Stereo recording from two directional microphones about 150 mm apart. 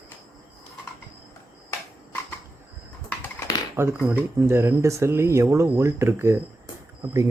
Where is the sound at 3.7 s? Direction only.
15° right (ahead or behind).